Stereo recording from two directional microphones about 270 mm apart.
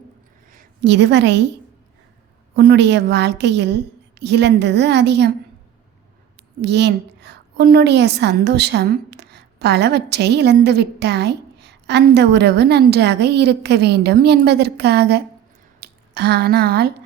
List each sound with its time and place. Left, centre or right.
0.5 s a woman's voice: right
2.6 s a woman's voice: right
6.6 s a woman's voice: right